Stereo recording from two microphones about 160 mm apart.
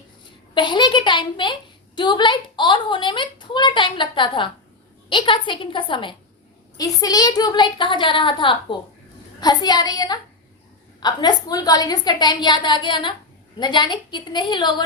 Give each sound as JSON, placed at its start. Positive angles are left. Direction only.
{"t": 0.5, "sound": "a woman's voice", "side_deg": 30}